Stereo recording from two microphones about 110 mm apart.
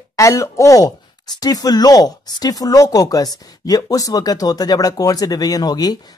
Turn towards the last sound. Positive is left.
turn(degrees=40)  # may be behind; listen again after turning